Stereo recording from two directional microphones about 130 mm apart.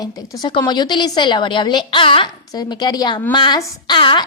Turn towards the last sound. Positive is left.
turn(degrees=35)  # may be behind; listen again after turning